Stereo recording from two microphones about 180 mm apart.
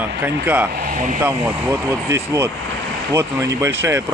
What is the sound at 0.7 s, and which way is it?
Speech, 50° right (ahead or behind).